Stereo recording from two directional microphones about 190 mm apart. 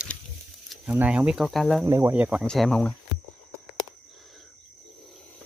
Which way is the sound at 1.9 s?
15° right (ahead or behind).